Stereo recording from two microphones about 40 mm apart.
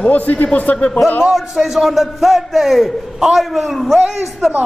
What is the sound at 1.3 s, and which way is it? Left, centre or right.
A man's voice, centre.